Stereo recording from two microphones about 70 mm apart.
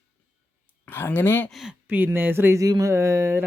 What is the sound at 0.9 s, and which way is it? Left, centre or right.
Speech, left.